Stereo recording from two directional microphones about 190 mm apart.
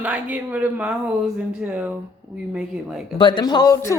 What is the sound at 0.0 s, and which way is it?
A man's voice, 10° right (ahead or behind).